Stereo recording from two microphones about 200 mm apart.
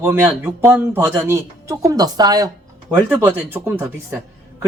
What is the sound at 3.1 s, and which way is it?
Speech, 10° right (ahead or behind).